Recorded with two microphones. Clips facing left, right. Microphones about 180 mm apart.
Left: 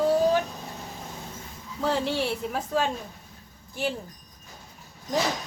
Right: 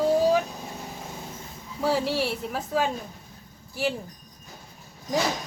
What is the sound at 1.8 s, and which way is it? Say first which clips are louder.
Speech: right 1 dB; 5° right (ahead or behind).